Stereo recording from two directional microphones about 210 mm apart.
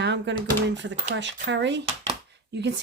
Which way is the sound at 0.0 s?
55° right (ahead or behind).